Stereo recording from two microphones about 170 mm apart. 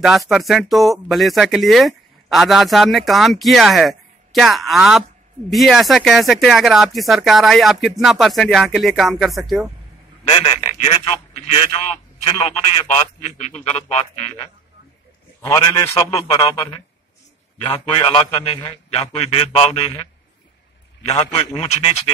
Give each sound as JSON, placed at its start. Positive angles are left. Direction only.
{"t": 0.3, "sound": "speech", "side_deg": 0}
{"t": 10.2, "sound": "a man's voice", "side_deg": 35}
{"t": 15.4, "sound": "a man's voice", "side_deg": 20}
{"t": 17.6, "sound": "a man's voice", "side_deg": 30}